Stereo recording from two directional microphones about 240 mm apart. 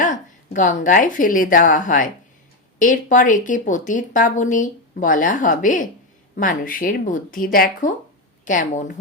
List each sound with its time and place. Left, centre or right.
0.0 s a woman's voice: left